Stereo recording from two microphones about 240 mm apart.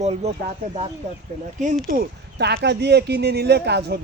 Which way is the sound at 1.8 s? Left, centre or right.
Right.